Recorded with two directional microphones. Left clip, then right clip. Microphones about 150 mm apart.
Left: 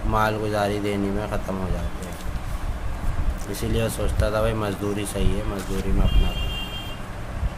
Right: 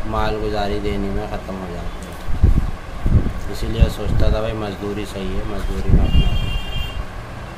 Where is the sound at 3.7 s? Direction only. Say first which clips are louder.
Right 1 dB; 50° left (ahead or behind).